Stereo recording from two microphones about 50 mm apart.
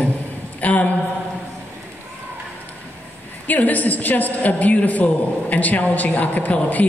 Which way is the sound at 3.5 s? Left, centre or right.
Left.